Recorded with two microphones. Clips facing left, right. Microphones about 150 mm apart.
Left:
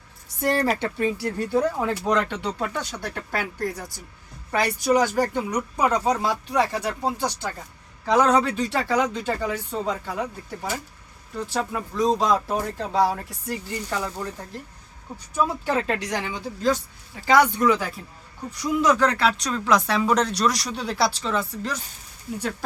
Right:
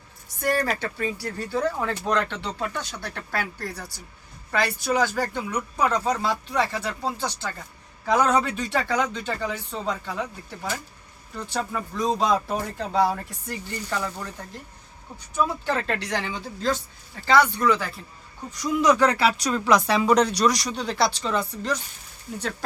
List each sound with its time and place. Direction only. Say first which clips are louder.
0.4 s speech: left 2 dB; 25° left (ahead or behind)
8.0 s speech: left 2 dB; centre (ahead or behind)
15.6 s speech: left 2 dB; 10° left (ahead or behind)
18.6 s speech: right 1 dB; centre (ahead or behind)